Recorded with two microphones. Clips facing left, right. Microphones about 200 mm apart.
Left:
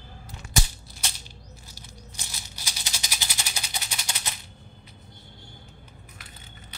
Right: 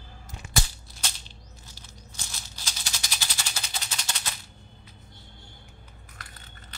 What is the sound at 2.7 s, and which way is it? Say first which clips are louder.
Music: even; 15° left (ahead or behind).